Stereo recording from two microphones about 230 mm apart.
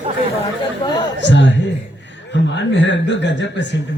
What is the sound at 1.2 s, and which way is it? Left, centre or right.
Speech, left.